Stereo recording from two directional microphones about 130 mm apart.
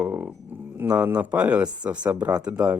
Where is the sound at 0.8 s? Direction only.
15° right (ahead or behind).